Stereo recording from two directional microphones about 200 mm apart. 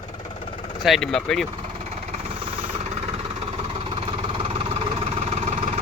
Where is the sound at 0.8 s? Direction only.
Centre (ahead or behind).